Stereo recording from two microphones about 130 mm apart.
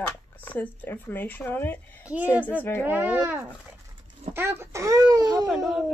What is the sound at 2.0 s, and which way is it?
Speech, 10° right (ahead or behind).